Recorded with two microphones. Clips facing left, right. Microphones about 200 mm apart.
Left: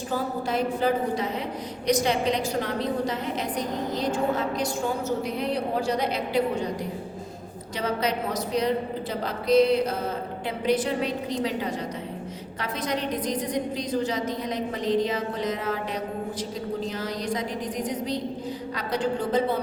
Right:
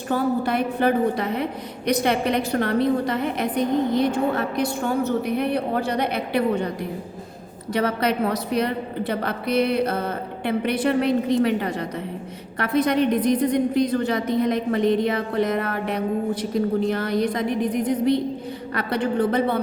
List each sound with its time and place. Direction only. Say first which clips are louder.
0.1 s a woman's voice: right 6 dB; 65° right (ahead or behind)
7.7 s a woman's voice: right 5 dB; 60° right (ahead or behind)